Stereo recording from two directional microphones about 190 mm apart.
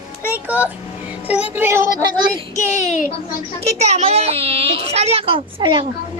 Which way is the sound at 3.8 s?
35° right (ahead or behind).